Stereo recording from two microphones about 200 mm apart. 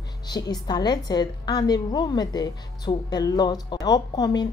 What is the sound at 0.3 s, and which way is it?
A woman's voice, 20° left (ahead or behind).